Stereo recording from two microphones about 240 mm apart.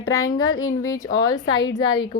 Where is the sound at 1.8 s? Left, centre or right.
Left.